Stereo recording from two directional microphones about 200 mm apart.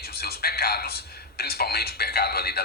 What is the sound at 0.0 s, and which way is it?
Speech, 50° left (ahead or behind).